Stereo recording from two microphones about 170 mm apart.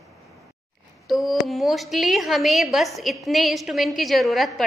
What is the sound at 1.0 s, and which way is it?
A woman's voice, centre (ahead or behind).